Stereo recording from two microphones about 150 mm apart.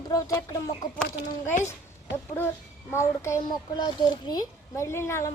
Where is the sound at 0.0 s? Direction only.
25° left (ahead or behind).